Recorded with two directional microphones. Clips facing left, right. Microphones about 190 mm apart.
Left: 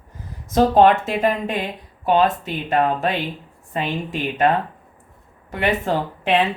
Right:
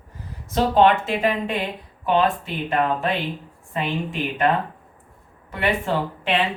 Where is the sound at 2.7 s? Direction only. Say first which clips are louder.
Left 3 dB; 40° left (ahead or behind).